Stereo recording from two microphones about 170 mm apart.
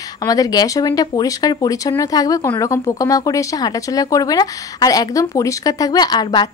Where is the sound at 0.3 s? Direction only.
20° left (ahead or behind).